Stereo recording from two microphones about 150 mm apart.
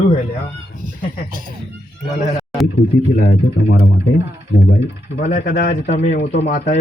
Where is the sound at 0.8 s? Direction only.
60° right (ahead or behind).